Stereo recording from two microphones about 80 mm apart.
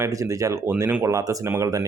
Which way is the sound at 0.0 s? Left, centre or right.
Right.